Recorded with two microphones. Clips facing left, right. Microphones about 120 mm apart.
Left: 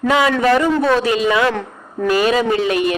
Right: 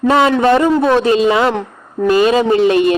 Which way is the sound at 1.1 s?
30° right (ahead or behind).